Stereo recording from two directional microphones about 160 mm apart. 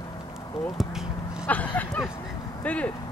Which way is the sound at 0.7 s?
Centre (ahead or behind).